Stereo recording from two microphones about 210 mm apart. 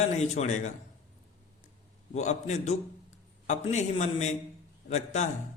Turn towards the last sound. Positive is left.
turn(degrees=35)  # may be behind; listen again after turning